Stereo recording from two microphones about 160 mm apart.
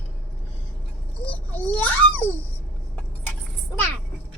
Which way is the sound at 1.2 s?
10° left (ahead or behind).